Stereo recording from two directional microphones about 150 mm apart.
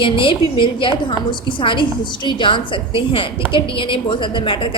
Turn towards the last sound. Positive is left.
turn(degrees=35)  # may be behind; listen again after turning